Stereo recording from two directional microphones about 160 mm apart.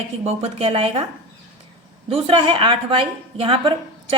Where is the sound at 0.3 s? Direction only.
40° right (ahead or behind).